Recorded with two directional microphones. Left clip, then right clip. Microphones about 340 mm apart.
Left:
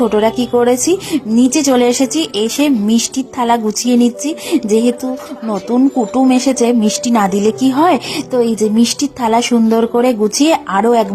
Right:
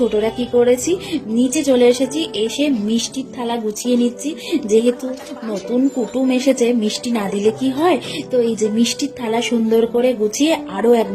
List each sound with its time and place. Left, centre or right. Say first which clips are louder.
0.1 s a woman's voice: left 5 dB; centre